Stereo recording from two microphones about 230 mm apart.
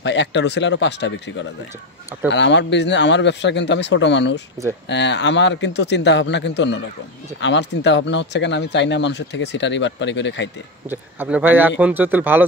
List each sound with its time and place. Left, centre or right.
0.0 s speech: left
10.9 s a man's voice: centre